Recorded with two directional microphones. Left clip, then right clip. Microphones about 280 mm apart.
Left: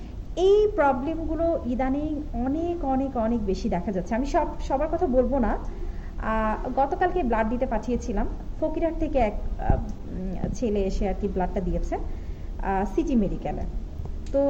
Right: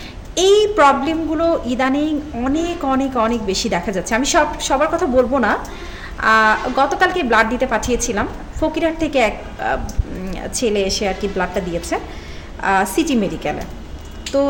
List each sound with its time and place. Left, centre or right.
0.5 s a woman's voice: centre